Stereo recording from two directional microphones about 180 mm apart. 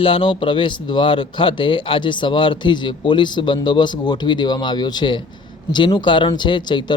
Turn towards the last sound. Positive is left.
turn(degrees=25)  # may be behind; listen again after turning